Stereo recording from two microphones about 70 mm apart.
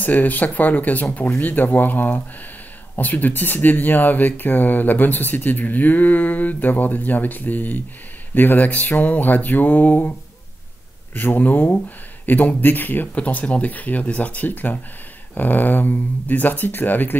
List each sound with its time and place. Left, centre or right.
0.0 s speech: left
11.1 s speech: left